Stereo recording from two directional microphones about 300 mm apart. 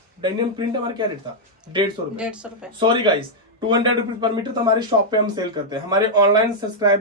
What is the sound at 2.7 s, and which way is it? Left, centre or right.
Speech, centre.